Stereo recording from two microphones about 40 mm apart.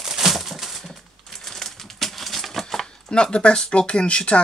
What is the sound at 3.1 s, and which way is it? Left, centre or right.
Speech, left.